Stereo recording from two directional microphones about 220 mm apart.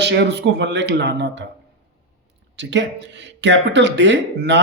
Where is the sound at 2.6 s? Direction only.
55° right (ahead or behind).